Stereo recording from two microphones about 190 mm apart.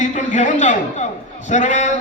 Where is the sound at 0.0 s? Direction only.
40° left (ahead or behind).